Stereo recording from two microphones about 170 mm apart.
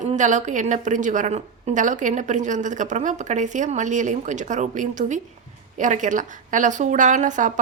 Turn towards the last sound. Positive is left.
turn(degrees=-45)  # may be behind; listen again after turning